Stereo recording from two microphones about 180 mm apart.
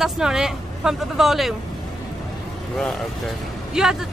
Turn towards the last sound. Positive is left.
turn(degrees=0)  # may be behind; listen again after turning